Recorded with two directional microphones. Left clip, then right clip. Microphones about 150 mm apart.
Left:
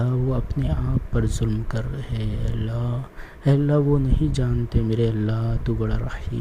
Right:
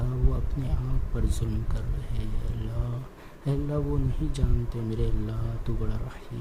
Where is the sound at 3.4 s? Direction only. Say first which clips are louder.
Left 10 dB; 40° left (ahead or behind).